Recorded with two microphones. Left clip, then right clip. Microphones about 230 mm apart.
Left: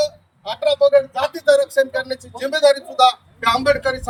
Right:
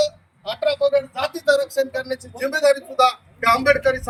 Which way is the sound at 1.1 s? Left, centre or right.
Centre.